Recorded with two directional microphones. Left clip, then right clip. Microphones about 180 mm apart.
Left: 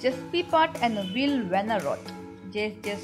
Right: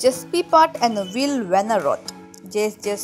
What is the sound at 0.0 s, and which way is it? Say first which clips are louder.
Speech: right 8 dB; 50° right (ahead or behind).